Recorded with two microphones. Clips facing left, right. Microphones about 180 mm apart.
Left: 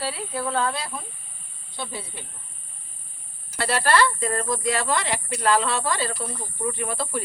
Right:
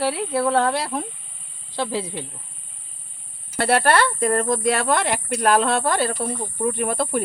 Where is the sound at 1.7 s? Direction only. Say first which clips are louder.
Right 9 dB; 90° right.